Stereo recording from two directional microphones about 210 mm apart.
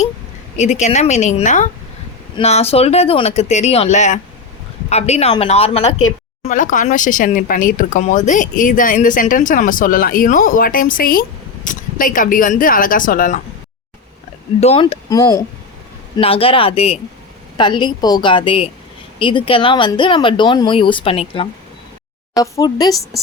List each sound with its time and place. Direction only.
0.5 s speech: 35° left (ahead or behind)
14.6 s speech: 30° left (ahead or behind)
15.1 s speech: 15° left (ahead or behind)
16.1 s speech: 25° left (ahead or behind)